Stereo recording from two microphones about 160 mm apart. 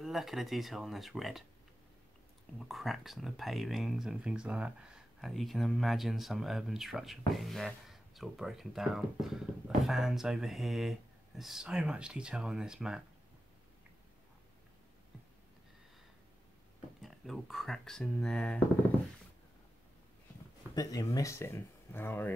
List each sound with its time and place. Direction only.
0.0 s speech: centre (ahead or behind)
2.7 s speech: centre (ahead or behind)
17.0 s speech: centre (ahead or behind)
20.7 s speech: 20° left (ahead or behind)